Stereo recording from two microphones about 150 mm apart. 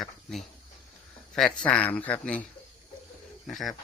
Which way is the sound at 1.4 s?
5° left (ahead or behind).